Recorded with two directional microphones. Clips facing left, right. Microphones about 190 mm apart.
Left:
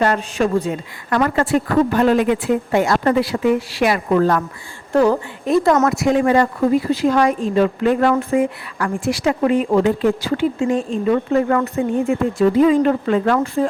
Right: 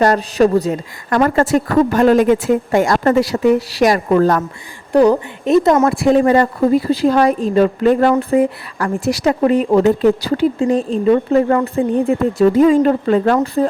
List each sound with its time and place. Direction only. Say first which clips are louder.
0.0 s speech: right 5 dB; 40° right (ahead or behind)
4.9 s speech: right 4 dB; 15° right (ahead or behind); by 13.7 s 40° right (ahead or behind)